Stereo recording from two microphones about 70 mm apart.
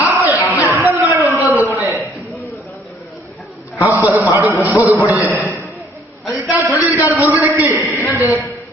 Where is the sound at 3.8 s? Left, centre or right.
Right.